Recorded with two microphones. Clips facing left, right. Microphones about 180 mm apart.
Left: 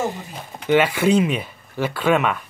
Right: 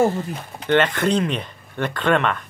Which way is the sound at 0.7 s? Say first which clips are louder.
Left 2 dB; 10° left (ahead or behind).